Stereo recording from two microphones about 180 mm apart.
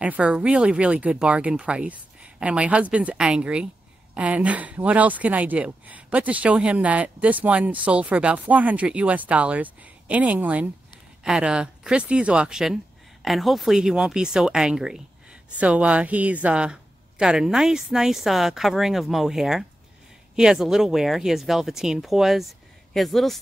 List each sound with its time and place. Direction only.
0.0 s speech: 5° right (ahead or behind)